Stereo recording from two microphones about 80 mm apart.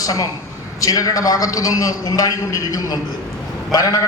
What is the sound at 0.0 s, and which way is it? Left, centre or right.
A man's voice, left.